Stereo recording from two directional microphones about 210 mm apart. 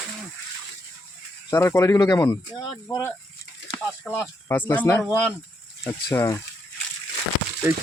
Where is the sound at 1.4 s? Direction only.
15° left (ahead or behind).